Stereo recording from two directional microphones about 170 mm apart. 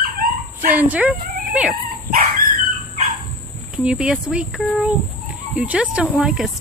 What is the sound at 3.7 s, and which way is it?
Speech, 5° right (ahead or behind).